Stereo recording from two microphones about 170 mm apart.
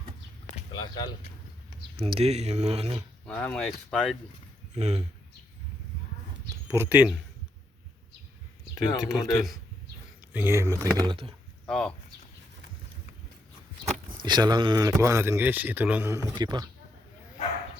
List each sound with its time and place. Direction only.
0.5 s speech: 25° left (ahead or behind)
2.0 s speech: 35° right (ahead or behind)
3.2 s speech: 5° left (ahead or behind)
4.7 s speech: 40° right (ahead or behind)
6.7 s speech: 10° right (ahead or behind)
8.7 s a man's voice: 20° left (ahead or behind)
10.3 s a man's voice: 15° right (ahead or behind)
11.7 s speech: 5° left (ahead or behind)
14.2 s a man's voice: 25° right (ahead or behind)